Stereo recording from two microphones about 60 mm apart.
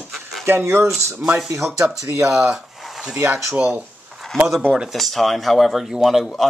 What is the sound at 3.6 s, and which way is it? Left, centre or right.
Speech, right.